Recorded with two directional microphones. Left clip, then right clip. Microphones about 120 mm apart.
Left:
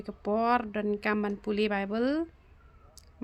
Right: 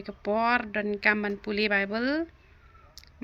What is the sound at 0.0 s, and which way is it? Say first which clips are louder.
Speech: right 2 dB; 40° left (ahead or behind).